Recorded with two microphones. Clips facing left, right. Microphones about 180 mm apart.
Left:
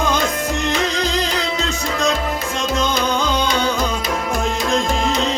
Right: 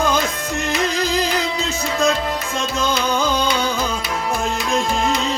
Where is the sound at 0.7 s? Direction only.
5° right (ahead or behind).